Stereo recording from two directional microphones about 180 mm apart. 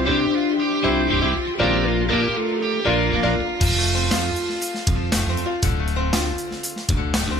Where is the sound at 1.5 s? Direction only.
Centre (ahead or behind).